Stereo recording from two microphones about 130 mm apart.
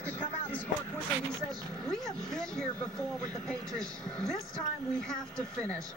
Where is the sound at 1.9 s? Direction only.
5° left (ahead or behind).